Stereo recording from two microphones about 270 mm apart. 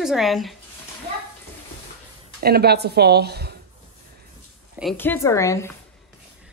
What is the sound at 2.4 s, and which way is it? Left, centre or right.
Speech, right.